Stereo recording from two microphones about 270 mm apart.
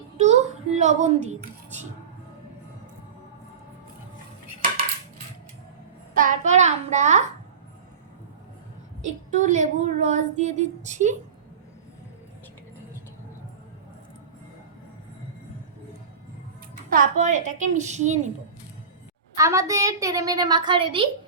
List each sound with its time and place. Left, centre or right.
0.2 s a sound: right
6.1 s a woman's voice: right
9.0 s a woman's voice: right
16.9 s a woman's voice: right
19.4 s a woman's voice: centre